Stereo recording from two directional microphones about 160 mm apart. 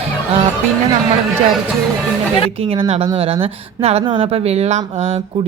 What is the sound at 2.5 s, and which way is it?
Speech, 35° right (ahead or behind).